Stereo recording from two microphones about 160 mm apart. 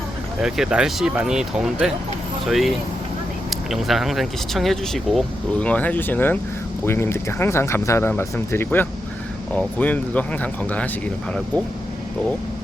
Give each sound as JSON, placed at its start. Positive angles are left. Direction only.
{"t": 0.3, "sound": "speech", "side_deg": -5}